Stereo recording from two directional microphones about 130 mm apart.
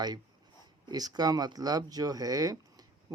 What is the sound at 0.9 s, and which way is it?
Speech, 30° right (ahead or behind).